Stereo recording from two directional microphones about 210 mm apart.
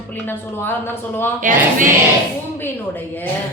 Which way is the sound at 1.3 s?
40° right (ahead or behind).